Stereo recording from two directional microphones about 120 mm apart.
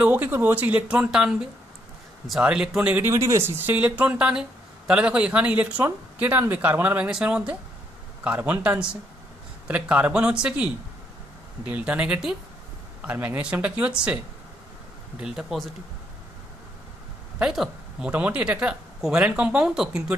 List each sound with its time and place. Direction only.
0.0 s speech: 15° right (ahead or behind)
3.1 s speech: 25° right (ahead or behind); by 15.7 s 5° right (ahead or behind)
17.4 s speech: 5° right (ahead or behind)